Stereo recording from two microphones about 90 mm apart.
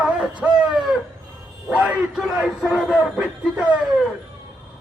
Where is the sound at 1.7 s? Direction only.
15° right (ahead or behind).